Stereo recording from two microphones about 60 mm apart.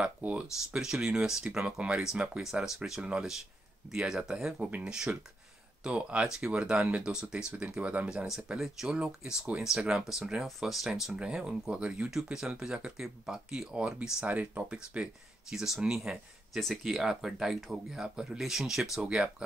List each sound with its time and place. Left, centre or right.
0.0 s speech: right
0.7 s speech: centre
8.3 s speech: centre; by 15.0 s right
15.5 s speech: centre
18.9 s speech: centre